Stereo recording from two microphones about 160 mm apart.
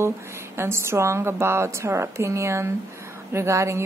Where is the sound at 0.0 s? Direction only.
15° right (ahead or behind).